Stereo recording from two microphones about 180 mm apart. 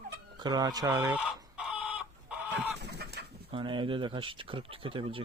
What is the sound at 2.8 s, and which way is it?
Bird, 65° right (ahead or behind).